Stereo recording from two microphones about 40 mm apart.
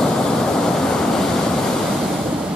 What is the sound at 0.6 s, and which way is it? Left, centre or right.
Waves, centre.